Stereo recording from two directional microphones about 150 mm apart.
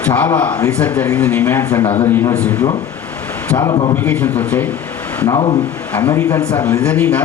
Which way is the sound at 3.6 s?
30° left (ahead or behind).